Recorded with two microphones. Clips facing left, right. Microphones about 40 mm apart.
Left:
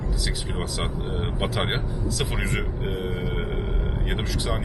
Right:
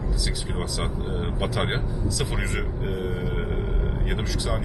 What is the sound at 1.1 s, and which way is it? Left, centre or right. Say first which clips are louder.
Speech: even; centre.